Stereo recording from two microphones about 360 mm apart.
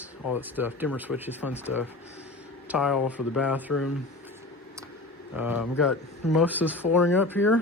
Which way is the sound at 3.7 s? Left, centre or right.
Left.